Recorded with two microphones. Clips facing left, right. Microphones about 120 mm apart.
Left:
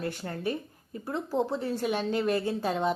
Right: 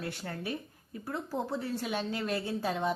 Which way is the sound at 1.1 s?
25° left (ahead or behind).